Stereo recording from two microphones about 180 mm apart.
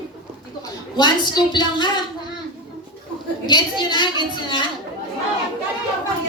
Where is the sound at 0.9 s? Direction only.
25° left (ahead or behind).